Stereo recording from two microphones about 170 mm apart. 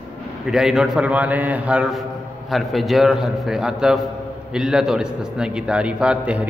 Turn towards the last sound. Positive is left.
turn(degrees=-5)  # may be behind; listen again after turning